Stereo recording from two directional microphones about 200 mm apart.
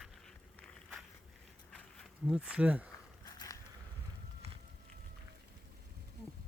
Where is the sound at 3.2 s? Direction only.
15° left (ahead or behind).